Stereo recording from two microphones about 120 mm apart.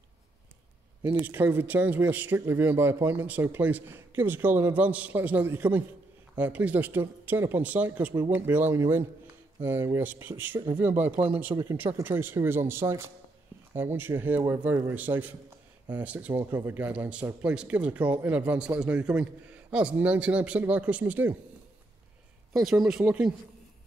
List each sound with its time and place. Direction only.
1.2 s speech: 15° right (ahead or behind)
22.5 s speech: centre (ahead or behind)